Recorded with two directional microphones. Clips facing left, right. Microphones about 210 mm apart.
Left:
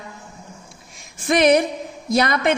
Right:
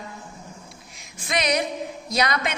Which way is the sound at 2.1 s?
50° left (ahead or behind).